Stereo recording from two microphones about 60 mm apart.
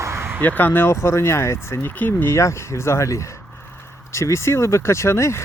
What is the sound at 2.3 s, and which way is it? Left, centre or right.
Speech, left.